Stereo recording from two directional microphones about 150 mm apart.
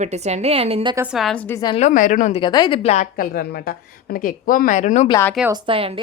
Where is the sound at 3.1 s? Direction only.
80° left; by 5.1 s 55° left (ahead or behind).